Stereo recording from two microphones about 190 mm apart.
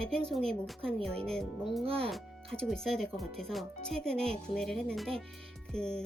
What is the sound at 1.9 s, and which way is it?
Speech, 30° right (ahead or behind).